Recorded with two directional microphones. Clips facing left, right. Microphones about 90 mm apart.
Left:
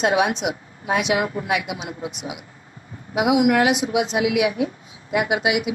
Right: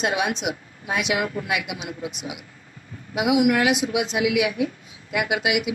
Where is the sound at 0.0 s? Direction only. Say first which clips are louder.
Left 5 dB; 45° left (ahead or behind).